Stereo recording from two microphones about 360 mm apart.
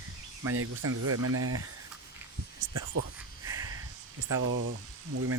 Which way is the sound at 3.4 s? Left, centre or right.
Centre.